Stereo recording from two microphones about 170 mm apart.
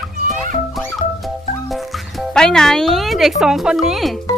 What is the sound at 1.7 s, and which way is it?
Speech, centre (ahead or behind).